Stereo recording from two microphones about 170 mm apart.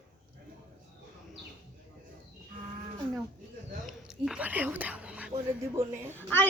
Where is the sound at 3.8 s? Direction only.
5° right (ahead or behind).